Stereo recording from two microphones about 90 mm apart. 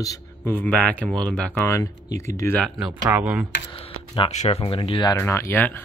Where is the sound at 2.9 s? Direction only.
20° right (ahead or behind).